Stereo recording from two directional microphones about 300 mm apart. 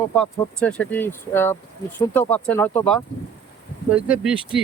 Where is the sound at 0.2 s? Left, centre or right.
Centre.